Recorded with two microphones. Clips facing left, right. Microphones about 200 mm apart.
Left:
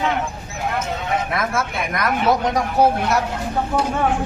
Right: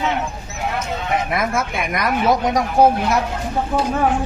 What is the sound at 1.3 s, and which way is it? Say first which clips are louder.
Speech: right 2 dB; 20° right (ahead or behind).